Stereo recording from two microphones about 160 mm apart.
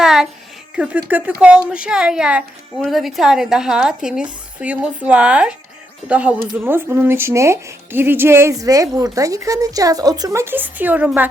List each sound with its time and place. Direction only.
0.0 s music: 5° right (ahead or behind)
0.8 s speech: 10° right (ahead or behind)